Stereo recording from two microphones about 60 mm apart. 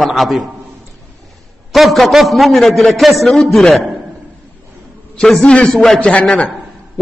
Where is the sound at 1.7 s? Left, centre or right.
Centre.